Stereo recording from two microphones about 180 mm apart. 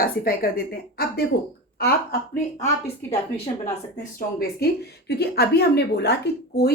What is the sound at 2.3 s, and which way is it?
Speech, 15° left (ahead or behind).